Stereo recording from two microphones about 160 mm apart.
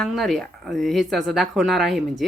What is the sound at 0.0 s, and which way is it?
A woman's voice, centre (ahead or behind).